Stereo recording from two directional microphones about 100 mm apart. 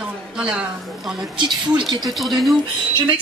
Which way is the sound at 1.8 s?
45° right (ahead or behind).